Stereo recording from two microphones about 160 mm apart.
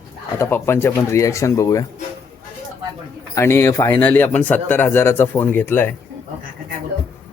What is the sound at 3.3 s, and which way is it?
A man's voice, 15° left (ahead or behind).